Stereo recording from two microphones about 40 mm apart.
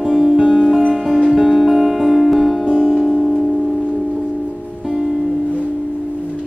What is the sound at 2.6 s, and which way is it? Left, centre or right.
Music, centre.